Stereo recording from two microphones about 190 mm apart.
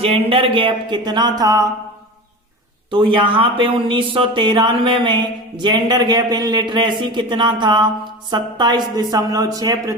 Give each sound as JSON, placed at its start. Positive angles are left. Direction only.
{"t": 0.0, "sound": "speech", "side_deg": -30}
{"t": 2.9, "sound": "speech", "side_deg": -25}